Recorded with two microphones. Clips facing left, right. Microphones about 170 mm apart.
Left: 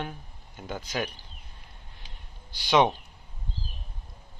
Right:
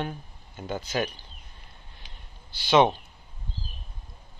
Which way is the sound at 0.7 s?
10° left (ahead or behind).